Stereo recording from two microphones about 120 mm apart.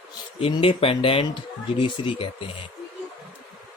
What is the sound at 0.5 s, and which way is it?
Speech, 45° left (ahead or behind).